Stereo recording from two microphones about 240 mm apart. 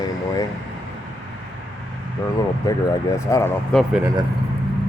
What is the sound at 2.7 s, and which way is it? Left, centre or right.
Speech, centre.